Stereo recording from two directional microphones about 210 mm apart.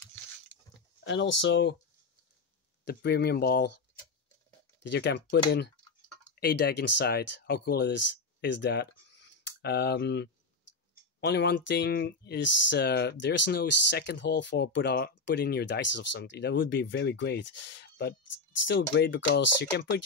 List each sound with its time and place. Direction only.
1.0 s speech: 60° left (ahead or behind)
2.8 s speech: 50° left (ahead or behind)
4.8 s speech: 55° left (ahead or behind)
6.4 s speech: 50° left (ahead or behind)